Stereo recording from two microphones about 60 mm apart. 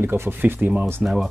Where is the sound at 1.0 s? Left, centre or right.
Right.